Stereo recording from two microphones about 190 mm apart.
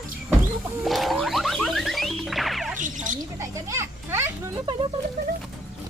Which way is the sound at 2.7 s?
40° right (ahead or behind).